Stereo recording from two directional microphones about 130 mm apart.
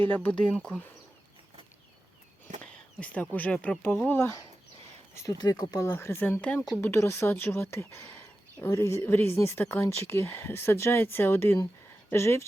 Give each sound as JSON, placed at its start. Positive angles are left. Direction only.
{"t": 0.1, "sound": "speech", "side_deg": 10}
{"t": 2.6, "sound": "a sound", "side_deg": 10}
{"t": 3.3, "sound": "a woman's voice", "side_deg": 10}
{"t": 5.9, "sound": "a woman's voice", "side_deg": 20}